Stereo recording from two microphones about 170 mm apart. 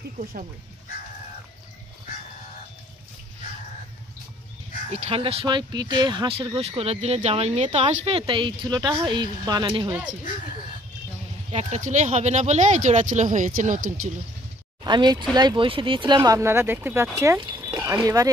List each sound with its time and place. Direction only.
0.2 s speech: 55° right (ahead or behind)
4.9 s speech: 40° right (ahead or behind)
5.2 s speech: 30° right (ahead or behind)
11.5 s speech: 45° right (ahead or behind)
14.8 s speech: 25° right (ahead or behind)
16.2 s speech: 15° right (ahead or behind)
17.4 s a sound: 25° right (ahead or behind)
17.7 s speech: 15° right (ahead or behind)